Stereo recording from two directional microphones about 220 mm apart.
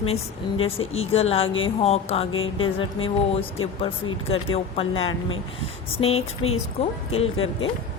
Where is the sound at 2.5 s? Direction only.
25° left (ahead or behind).